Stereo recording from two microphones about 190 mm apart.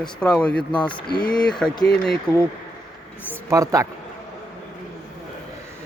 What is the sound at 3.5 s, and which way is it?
Speech, 15° right (ahead or behind).